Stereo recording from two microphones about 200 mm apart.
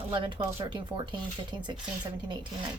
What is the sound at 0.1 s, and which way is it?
Speech, 25° right (ahead or behind).